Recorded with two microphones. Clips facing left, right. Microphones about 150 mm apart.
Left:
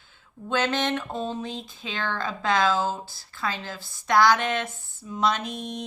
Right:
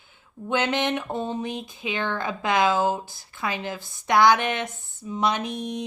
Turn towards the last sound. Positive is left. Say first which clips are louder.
# right 3 dB
turn(degrees=-15)  # may be behind; listen again after turning